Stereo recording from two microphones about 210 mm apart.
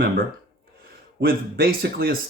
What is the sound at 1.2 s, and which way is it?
Speech, 45° right (ahead or behind).